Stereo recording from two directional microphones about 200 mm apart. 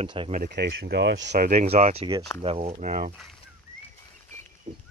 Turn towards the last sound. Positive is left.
turn(degrees=-40)  # may be behind; listen again after turning